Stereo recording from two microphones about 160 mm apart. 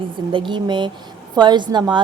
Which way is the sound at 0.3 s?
30° right (ahead or behind).